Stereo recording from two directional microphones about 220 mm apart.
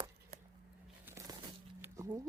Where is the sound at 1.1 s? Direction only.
15° right (ahead or behind).